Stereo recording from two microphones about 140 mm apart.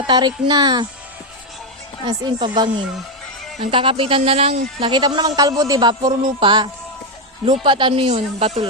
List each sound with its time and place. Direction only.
0.1 s speech: 30° right (ahead or behind)
2.0 s speech: 30° right (ahead or behind)
3.6 s speech: 40° right (ahead or behind)
4.8 s a woman's voice: 30° right (ahead or behind); by 8.6 s 50° right (ahead or behind)